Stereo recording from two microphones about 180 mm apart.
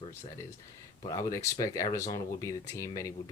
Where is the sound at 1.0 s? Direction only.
20° left (ahead or behind).